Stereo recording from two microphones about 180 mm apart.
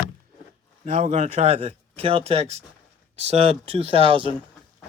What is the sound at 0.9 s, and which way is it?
Speech, 45° right (ahead or behind).